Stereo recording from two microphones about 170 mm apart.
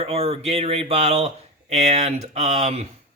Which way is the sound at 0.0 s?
35° right (ahead or behind).